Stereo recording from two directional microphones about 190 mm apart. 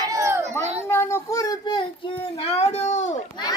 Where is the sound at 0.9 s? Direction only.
15° left (ahead or behind).